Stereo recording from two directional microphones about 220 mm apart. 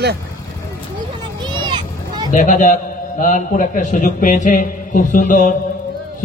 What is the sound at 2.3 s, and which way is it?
A man's voice, 35° left (ahead or behind).